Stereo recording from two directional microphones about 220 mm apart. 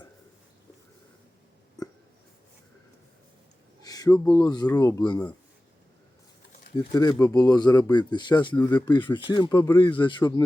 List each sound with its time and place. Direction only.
1.8 s a sound: 15° left (ahead or behind)
3.8 s speech: 15° left (ahead or behind)
6.7 s speech: 20° left (ahead or behind)